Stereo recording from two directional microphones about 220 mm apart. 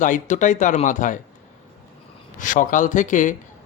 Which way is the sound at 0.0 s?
35° left (ahead or behind).